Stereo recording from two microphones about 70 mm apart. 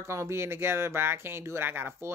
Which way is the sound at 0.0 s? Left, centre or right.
Right.